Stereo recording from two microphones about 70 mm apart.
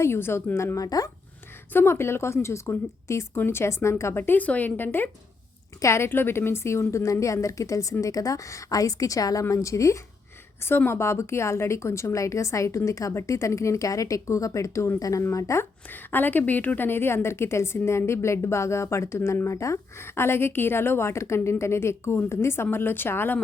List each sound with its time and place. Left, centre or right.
0.0 s a woman's voice: left
0.9 s speech: left
1.7 s a woman's voice: left
5.8 s a woman's voice: left
10.6 s a woman's voice: left
15.9 s a woman's voice: left